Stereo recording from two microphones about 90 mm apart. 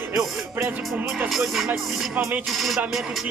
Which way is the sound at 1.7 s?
15° right (ahead or behind).